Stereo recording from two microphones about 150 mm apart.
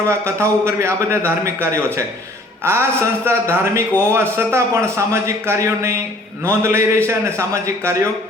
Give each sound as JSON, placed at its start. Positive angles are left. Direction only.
{"t": 0.1, "sound": "a man's voice", "side_deg": -15}